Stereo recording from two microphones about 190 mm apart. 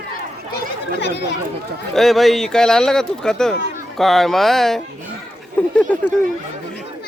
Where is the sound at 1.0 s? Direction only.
65° left (ahead or behind).